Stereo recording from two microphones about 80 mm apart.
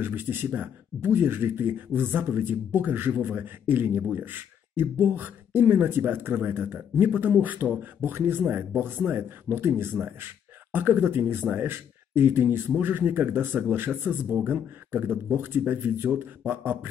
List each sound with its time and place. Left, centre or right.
0.0 s speech: right